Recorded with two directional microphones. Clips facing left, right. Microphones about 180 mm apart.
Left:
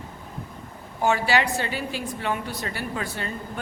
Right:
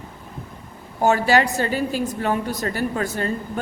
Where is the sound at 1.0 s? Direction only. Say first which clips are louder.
Right 4 dB; 45° right (ahead or behind).